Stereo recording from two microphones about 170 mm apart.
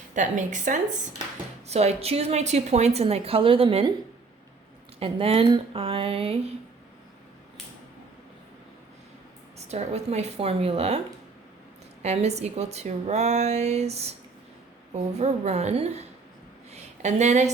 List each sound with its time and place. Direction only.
0.1 s a woman's voice: 45° right (ahead or behind)
4.9 s a woman's voice: 35° right (ahead or behind)
9.6 s a woman's voice: 40° right (ahead or behind)
12.0 s a woman's voice: 40° right (ahead or behind)
15.2 s a woman's voice: 40° right (ahead or behind)
16.7 s a sound: 40° right (ahead or behind)